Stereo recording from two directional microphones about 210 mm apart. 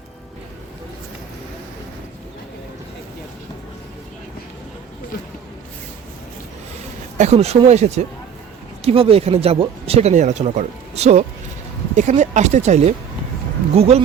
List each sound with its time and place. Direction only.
7.2 s speech: 30° right (ahead or behind)